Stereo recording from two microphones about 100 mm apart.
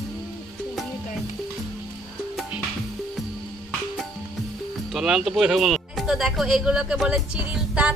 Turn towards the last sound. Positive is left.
turn(degrees=-10)  # may be behind; listen again after turning